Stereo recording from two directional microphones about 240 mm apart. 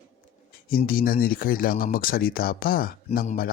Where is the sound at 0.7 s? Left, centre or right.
Left.